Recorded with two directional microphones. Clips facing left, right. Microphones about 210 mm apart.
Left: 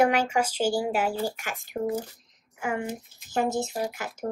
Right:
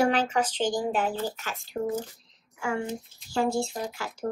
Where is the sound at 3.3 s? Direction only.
20° left (ahead or behind).